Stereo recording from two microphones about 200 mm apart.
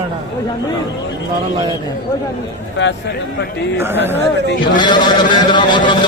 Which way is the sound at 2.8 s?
65° left (ahead or behind).